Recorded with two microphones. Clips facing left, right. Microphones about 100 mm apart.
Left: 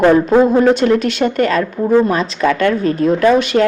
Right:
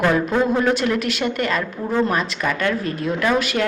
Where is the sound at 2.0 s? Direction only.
25° left (ahead or behind).